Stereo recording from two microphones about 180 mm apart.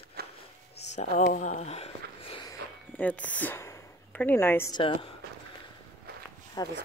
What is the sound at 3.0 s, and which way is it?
Speech, 10° left (ahead or behind).